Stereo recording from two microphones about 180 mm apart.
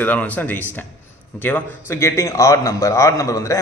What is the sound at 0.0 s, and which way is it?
A man's voice, 10° left (ahead or behind).